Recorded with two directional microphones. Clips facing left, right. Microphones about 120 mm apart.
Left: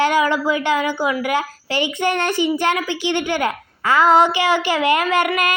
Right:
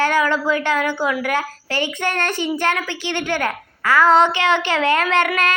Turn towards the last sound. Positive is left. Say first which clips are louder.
# even
turn(degrees=10)  # may be behind; listen again after turning